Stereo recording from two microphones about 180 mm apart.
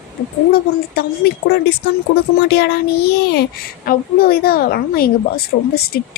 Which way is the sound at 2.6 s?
65° left (ahead or behind).